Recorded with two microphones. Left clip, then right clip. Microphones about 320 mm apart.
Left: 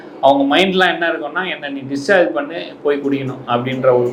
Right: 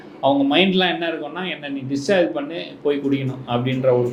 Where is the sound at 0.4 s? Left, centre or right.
Left.